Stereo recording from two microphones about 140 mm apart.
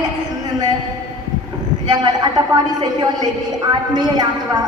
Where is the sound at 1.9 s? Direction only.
30° right (ahead or behind).